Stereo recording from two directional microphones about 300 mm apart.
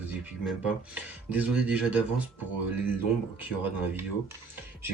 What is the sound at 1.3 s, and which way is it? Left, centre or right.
Speech, centre.